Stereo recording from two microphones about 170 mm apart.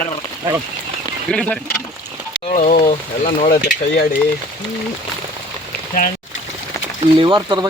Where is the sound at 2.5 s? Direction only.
45° left (ahead or behind).